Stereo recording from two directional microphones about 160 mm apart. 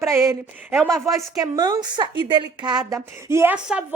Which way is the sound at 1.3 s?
25° right (ahead or behind).